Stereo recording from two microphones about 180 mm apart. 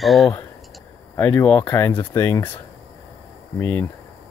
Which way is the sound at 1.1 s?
10° left (ahead or behind).